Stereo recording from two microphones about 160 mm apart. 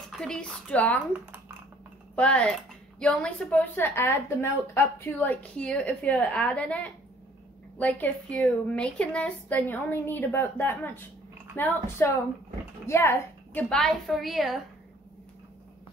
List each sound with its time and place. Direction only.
0.1 s a woman's voice: 5° left (ahead or behind)
2.1 s a woman's voice: 5° left (ahead or behind)